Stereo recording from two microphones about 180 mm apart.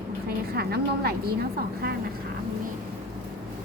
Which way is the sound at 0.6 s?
60° right (ahead or behind).